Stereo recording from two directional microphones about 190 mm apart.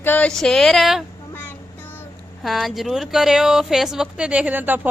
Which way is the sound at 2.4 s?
Centre (ahead or behind).